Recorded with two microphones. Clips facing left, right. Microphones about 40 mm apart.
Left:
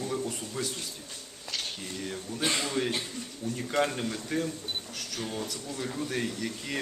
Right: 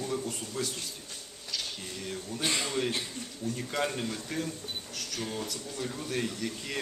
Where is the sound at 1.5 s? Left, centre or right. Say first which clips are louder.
Left 1 dB; left.